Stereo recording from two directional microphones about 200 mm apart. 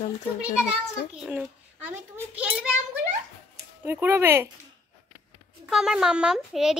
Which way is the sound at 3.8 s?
10° right (ahead or behind).